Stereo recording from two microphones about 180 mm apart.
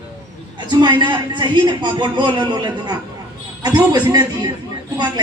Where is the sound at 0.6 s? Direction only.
25° right (ahead or behind).